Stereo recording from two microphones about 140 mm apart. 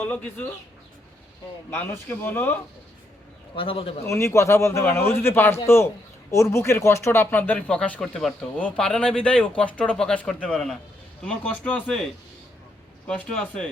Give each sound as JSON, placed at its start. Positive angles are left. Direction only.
{"t": 0.0, "sound": "speech", "side_deg": 10}
{"t": 1.7, "sound": "speech", "side_deg": 15}
{"t": 3.5, "sound": "a man's voice", "side_deg": 40}
{"t": 4.0, "sound": "a man's voice", "side_deg": 20}
{"t": 13.1, "sound": "speech", "side_deg": 5}